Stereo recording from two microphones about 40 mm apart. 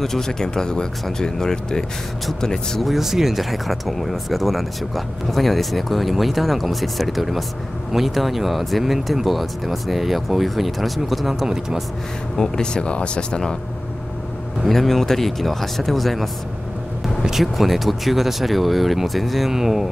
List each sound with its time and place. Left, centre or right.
0.0 s speech: centre
2.8 s speech: centre
11.4 s speech: centre
12.4 s speech: centre
14.7 s speech: centre